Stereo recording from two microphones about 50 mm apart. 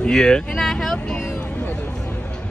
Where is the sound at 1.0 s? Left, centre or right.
Centre.